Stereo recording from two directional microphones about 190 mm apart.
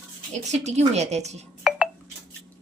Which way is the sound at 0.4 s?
35° right (ahead or behind).